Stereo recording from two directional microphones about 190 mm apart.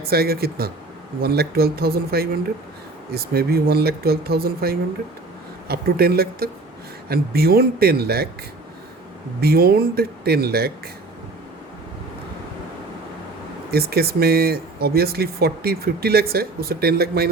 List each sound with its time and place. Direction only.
0.1 s speech: 55° right (ahead or behind)
9.4 s speech: 55° right (ahead or behind)
13.7 s speech: 55° right (ahead or behind)